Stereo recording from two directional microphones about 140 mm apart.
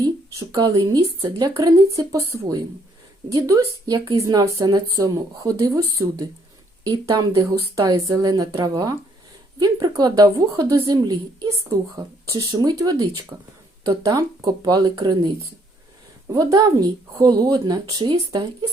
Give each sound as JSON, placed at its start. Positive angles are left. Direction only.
{"t": 0.0, "sound": "speech", "side_deg": -25}
{"t": 16.3, "sound": "speech", "side_deg": -25}